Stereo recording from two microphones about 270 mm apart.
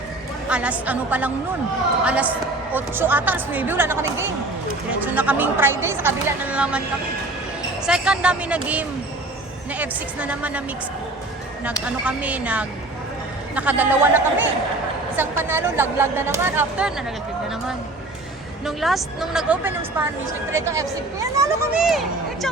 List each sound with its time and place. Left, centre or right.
0.4 s a woman's voice: centre
7.9 s a woman's voice: centre
12.0 s a woman's voice: centre
18.6 s a woman's voice: centre